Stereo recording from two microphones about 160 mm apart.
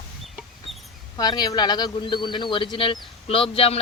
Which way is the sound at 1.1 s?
25° left (ahead or behind).